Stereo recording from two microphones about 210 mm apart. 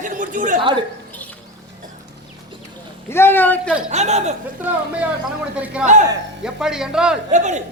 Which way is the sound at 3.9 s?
30° right (ahead or behind).